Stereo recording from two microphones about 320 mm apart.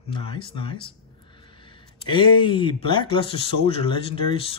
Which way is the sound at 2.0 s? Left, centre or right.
Centre.